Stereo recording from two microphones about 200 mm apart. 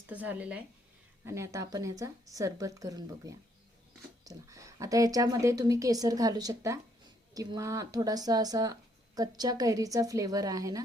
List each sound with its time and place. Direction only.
0.1 s speech: 10° right (ahead or behind)